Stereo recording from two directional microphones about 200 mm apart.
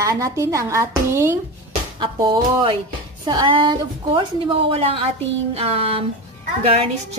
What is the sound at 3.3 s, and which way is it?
A woman's voice, 20° right (ahead or behind).